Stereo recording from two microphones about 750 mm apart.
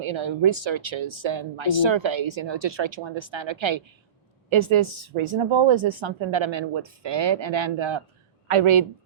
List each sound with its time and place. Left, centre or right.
0.0 s speech: right